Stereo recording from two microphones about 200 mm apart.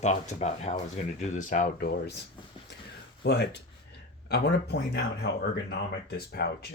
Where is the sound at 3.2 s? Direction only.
55° left (ahead or behind).